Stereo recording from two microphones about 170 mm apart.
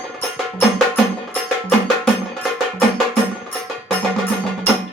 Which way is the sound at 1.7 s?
Centre (ahead or behind).